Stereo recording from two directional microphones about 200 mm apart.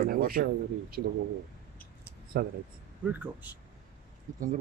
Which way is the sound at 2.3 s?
45° right (ahead or behind).